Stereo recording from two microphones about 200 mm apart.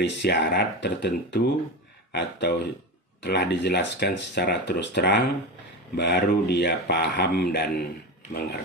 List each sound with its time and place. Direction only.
0.0 s speech: 60° left (ahead or behind)